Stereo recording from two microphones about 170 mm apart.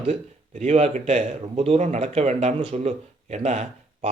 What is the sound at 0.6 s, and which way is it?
Speech, 40° right (ahead or behind).